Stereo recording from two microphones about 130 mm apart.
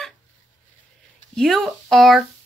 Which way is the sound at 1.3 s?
5° left (ahead or behind).